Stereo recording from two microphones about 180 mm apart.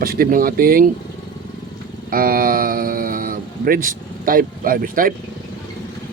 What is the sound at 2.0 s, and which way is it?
Speech, 55° right (ahead or behind).